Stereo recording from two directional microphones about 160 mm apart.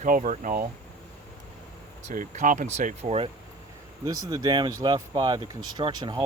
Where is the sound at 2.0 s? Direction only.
50° right (ahead or behind).